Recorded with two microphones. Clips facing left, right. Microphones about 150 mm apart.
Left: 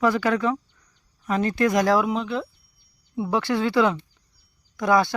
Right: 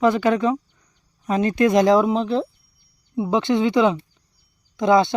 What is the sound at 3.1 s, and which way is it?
Speech, 20° right (ahead or behind).